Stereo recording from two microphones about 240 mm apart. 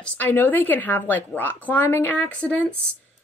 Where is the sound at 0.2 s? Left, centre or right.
Centre.